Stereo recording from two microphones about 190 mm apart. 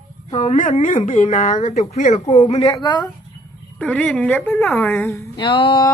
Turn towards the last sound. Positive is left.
turn(degrees=25)  # may be behind; listen again after turning